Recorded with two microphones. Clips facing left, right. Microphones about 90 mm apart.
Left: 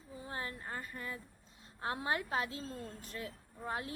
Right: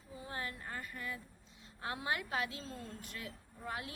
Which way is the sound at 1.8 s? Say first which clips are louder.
Left 2 dB; 35° left (ahead or behind).